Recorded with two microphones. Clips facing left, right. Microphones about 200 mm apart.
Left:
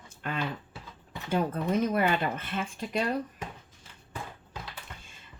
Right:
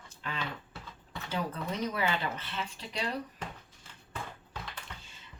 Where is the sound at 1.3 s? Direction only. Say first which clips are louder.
Left 7 dB; 50° left (ahead or behind).